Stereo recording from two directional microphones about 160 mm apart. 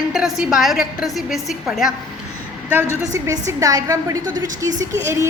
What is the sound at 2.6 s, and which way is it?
A woman's voice, 15° right (ahead or behind).